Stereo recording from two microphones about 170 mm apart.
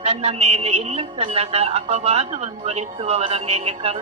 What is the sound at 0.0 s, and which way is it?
Speech, 35° right (ahead or behind).